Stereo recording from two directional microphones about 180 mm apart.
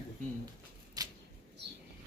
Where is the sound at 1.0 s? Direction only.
20° right (ahead or behind).